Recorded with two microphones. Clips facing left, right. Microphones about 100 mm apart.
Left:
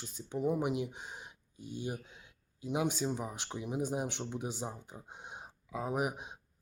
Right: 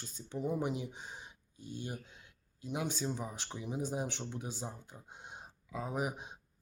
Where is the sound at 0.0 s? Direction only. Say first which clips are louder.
Left 4 dB; 10° left (ahead or behind).